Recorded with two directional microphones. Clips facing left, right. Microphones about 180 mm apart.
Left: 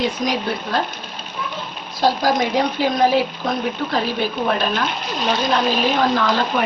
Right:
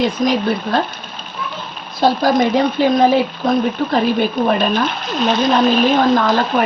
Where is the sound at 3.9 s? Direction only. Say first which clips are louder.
Right 7 dB; 55° right (ahead or behind).